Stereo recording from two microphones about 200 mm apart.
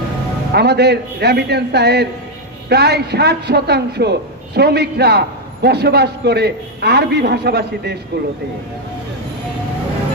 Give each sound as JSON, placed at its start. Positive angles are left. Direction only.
{"t": 0.5, "sound": "a man's voice", "side_deg": -55}